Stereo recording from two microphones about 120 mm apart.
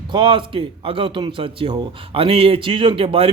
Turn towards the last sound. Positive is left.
turn(degrees=-50)  # may be behind; listen again after turning